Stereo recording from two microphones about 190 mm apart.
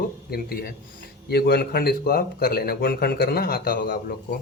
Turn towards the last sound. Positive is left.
turn(degrees=50)  # may be behind; listen again after turning